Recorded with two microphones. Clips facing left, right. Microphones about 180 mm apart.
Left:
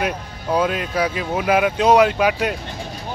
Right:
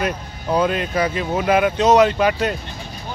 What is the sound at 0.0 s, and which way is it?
Speech, 5° left (ahead or behind).